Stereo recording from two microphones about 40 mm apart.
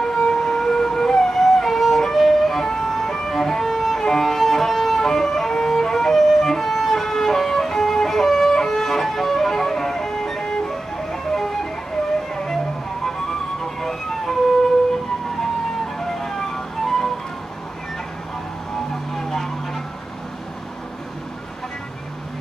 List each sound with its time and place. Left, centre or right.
0.0 s a sound: centre
3.7 s music: centre
6.7 s violin: centre
10.4 s music: left
10.7 s music: centre
13.0 s music: centre
16.0 s music: centre
19.1 s vehicle: centre